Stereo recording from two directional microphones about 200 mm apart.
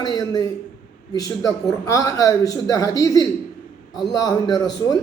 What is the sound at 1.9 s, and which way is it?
A woman's voice, 15° left (ahead or behind).